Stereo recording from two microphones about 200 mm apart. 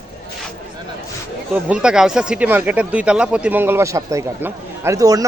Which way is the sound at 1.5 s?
5° right (ahead or behind).